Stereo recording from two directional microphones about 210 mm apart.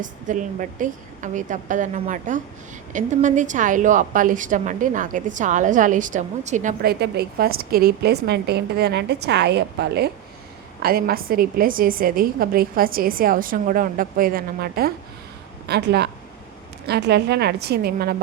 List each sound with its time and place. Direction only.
0.0 s a woman's voice: 35° right (ahead or behind)
7.0 s a woman's voice: 50° right (ahead or behind)